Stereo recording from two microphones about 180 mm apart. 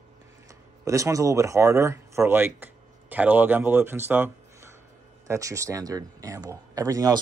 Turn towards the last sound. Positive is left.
turn(degrees=-20)  # may be behind; listen again after turning